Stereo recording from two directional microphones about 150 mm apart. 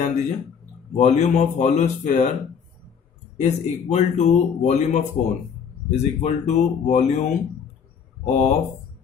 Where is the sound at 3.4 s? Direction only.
50° left (ahead or behind).